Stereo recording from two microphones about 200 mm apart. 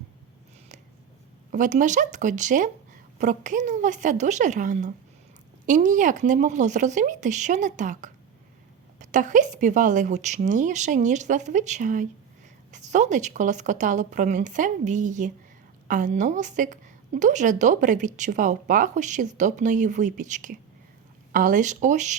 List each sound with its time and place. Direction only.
1.5 s a woman's voice: 40° right (ahead or behind)